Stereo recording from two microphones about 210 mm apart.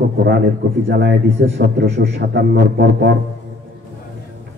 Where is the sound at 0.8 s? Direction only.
55° right (ahead or behind).